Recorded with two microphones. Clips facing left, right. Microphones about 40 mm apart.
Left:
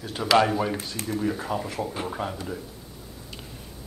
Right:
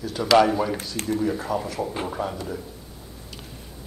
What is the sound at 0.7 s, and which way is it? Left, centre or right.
Speech, left.